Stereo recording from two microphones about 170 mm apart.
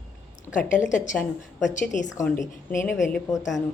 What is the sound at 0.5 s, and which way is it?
A woman's voice, 50° left (ahead or behind).